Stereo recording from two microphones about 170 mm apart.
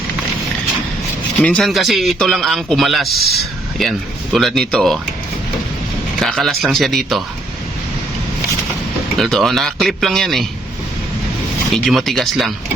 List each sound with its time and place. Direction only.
1.4 s a man's voice: 5° left (ahead or behind)
6.1 s a man's voice: centre (ahead or behind)
9.1 s a man's voice: centre (ahead or behind)
11.7 s a man's voice: centre (ahead or behind)